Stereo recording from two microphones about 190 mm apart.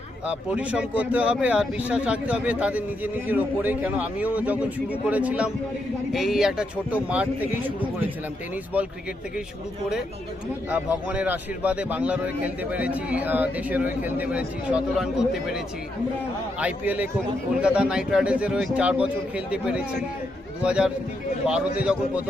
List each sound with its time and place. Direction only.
0.5 s speech: 5° right (ahead or behind)
10.7 s speech: 10° right (ahead or behind)